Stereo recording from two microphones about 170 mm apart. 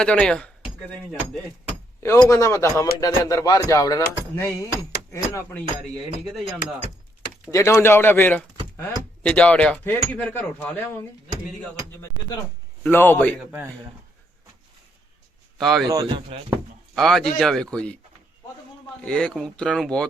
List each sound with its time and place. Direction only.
0.0 s speech: 5° left (ahead or behind)
2.3 s speech: 15° left (ahead or behind)
6.3 s speech: 5° right (ahead or behind)
7.5 s speech: 15° left (ahead or behind)
12.8 s speech: 10° left (ahead or behind)
13.4 s a man's voice: 10° right (ahead or behind)
15.5 s speech: centre (ahead or behind)
15.9 s speech: 25° right (ahead or behind)
16.9 s speech: centre (ahead or behind)
19.0 s speech: 5° left (ahead or behind)